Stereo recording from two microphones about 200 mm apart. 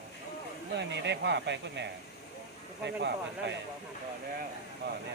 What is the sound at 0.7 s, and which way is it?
Speech, 60° right (ahead or behind).